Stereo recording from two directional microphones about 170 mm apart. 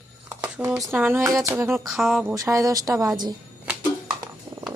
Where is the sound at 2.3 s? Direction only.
20° right (ahead or behind).